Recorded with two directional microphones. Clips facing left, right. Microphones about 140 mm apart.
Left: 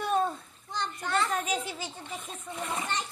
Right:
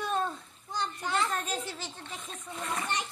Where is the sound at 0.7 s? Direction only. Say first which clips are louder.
Left 1 dB; 10° right (ahead or behind).